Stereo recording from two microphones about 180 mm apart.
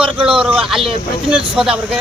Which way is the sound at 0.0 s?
5° right (ahead or behind).